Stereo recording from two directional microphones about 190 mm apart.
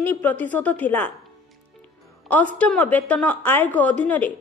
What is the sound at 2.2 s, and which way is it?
A woman's voice, 5° left (ahead or behind).